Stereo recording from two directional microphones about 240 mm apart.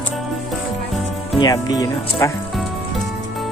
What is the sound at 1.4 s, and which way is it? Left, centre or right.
Speech, centre.